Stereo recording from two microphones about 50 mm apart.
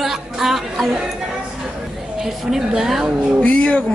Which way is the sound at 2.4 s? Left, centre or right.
Centre.